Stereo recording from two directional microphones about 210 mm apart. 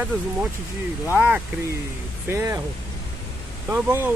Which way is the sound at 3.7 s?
10° right (ahead or behind).